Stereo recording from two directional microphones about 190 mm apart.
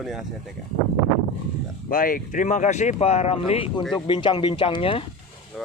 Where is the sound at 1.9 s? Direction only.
50° left (ahead or behind); by 5.0 s 30° left (ahead or behind).